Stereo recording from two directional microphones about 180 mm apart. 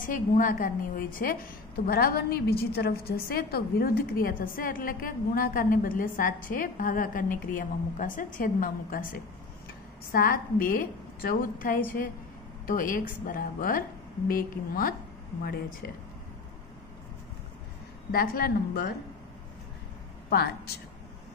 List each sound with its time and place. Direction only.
0.0 s a woman's voice: 50° left (ahead or behind)
18.1 s a woman's voice: 55° left (ahead or behind)
20.2 s a woman's voice: 60° left (ahead or behind)